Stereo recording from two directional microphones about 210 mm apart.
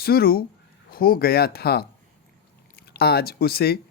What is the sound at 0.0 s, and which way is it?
Speech, 45° left (ahead or behind).